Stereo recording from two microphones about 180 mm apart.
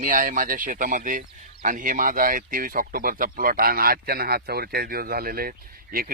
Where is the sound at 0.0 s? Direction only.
50° right (ahead or behind).